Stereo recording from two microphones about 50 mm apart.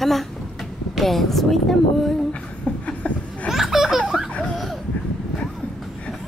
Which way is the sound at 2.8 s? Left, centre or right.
Left.